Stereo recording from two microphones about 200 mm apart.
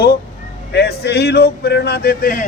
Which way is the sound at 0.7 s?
55° left (ahead or behind).